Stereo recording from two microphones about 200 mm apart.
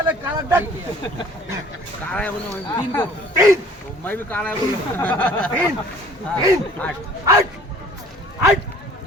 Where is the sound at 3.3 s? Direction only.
15° right (ahead or behind).